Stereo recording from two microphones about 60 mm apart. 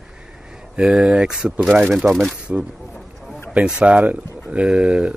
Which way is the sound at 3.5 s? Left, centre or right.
Centre.